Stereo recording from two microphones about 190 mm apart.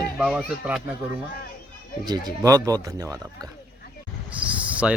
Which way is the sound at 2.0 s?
20° right (ahead or behind).